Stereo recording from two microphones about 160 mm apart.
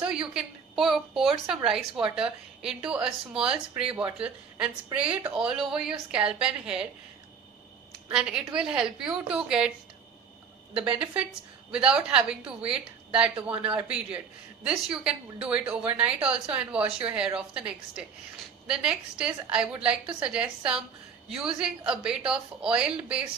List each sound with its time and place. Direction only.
0.0 s speech: 5° right (ahead or behind)
8.1 s speech: 5° right (ahead or behind)
10.8 s a woman's voice: 10° right (ahead or behind)